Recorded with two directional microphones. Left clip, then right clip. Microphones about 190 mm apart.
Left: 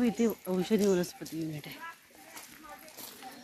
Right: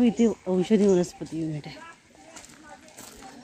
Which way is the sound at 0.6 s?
35° right (ahead or behind).